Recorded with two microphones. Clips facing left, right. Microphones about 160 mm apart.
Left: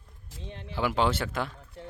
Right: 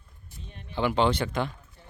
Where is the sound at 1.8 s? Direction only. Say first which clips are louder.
Left 11 dB; 75° left (ahead or behind).